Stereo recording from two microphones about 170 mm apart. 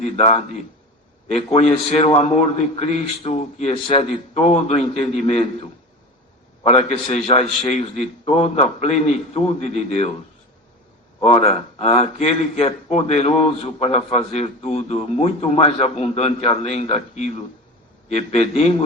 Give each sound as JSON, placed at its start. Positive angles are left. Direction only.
{"t": 0.0, "sound": "a man's voice", "side_deg": 35}
{"t": 6.6, "sound": "a man's voice", "side_deg": 35}
{"t": 11.2, "sound": "a man's voice", "side_deg": 35}